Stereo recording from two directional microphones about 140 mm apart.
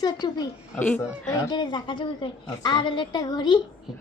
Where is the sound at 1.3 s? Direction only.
30° left (ahead or behind).